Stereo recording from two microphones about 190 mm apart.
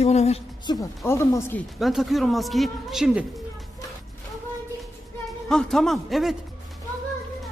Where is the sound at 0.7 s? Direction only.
15° left (ahead or behind).